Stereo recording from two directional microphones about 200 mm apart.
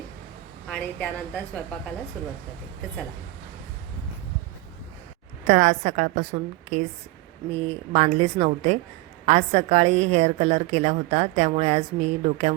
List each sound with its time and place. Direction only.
0.7 s a woman's voice: 5° left (ahead or behind)
5.5 s a woman's voice: 40° right (ahead or behind)